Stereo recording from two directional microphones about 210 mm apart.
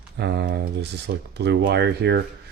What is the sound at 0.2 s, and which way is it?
Speech, 55° right (ahead or behind).